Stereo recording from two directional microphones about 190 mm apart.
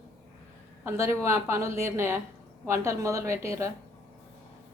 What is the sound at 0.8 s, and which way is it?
A woman's voice, 15° right (ahead or behind).